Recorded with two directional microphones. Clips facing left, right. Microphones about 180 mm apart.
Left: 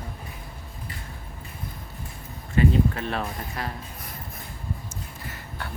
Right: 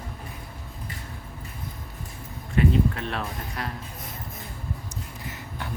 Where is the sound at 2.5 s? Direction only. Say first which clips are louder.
Left 1 dB; centre (ahead or behind).